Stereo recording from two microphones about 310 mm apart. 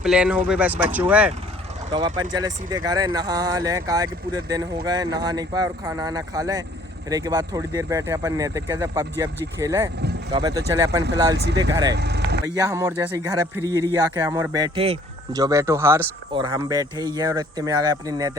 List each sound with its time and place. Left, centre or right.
0.0 s speech: centre
11.9 s speech: right
12.5 s speech: centre